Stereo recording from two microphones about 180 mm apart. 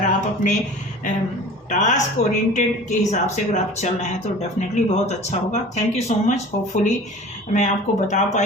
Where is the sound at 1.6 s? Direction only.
40° left (ahead or behind).